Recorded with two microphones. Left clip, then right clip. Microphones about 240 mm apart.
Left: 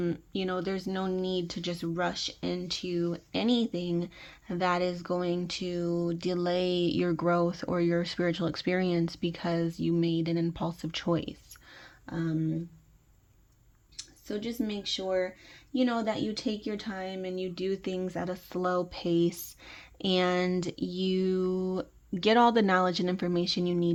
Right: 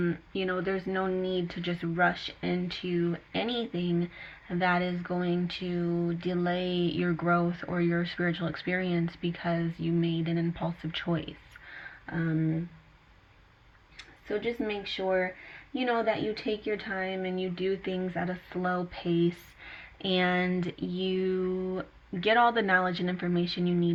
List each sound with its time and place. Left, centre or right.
0.9 s speech: left
1.3 s speech: left
14.3 s speech: left